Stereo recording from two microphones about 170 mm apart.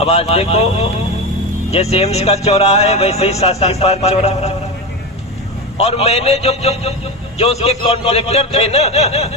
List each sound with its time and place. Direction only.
0.0 s a man's voice: 35° left (ahead or behind)
5.8 s a man's voice: 40° left (ahead or behind)